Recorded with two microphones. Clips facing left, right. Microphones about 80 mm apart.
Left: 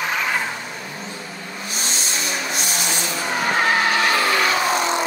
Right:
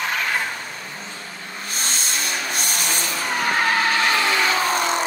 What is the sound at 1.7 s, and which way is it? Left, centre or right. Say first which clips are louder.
Vehicle: even; right.